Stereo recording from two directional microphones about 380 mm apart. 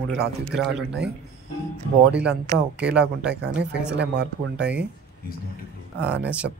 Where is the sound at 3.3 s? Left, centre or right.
Right.